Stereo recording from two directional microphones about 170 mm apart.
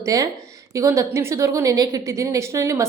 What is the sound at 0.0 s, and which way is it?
A woman's voice, 20° right (ahead or behind).